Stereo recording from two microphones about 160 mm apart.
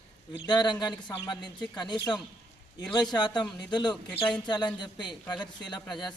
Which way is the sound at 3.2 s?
25° left (ahead or behind).